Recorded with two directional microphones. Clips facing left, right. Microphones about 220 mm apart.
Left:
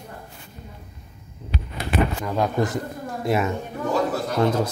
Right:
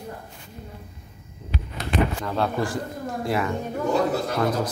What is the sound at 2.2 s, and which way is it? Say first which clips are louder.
A man's voice: left 2 dB; 15° left (ahead or behind).